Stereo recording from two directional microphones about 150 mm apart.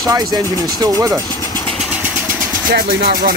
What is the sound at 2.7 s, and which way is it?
Speech, 80° right.